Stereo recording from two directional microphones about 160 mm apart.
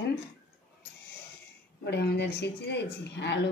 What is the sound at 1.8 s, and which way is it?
A woman's voice, 90° left.